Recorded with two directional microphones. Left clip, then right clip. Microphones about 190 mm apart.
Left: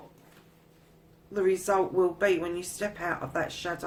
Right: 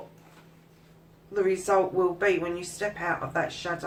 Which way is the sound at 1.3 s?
50° left (ahead or behind).